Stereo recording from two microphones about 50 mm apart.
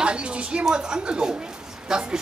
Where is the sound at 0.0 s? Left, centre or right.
Right.